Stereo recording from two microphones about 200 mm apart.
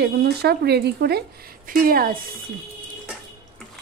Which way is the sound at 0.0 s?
55° right (ahead or behind).